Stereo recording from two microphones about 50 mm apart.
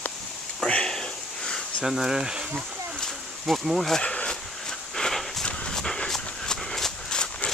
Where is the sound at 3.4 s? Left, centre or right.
Centre.